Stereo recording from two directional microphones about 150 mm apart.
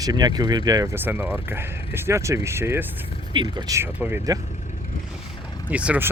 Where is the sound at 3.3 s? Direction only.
30° right (ahead or behind).